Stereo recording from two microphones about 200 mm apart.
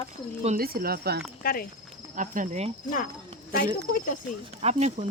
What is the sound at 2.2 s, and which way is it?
Speech, 40° right (ahead or behind).